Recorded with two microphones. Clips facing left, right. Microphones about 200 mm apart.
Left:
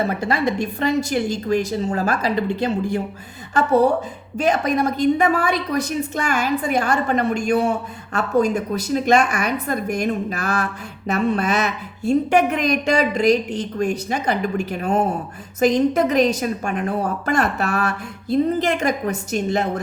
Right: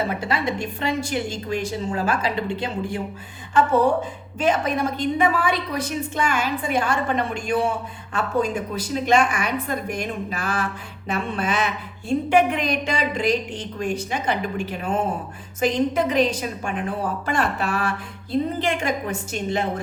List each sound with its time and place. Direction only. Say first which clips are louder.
0.1 s a woman's voice: left 4 dB; 40° left (ahead or behind)
4.4 s a woman's voice: left 3 dB; 40° left (ahead or behind)